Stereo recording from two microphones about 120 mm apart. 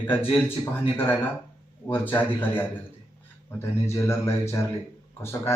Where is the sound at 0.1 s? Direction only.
20° left (ahead or behind).